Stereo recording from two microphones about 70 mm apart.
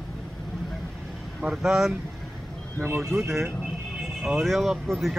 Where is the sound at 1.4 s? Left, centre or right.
Centre.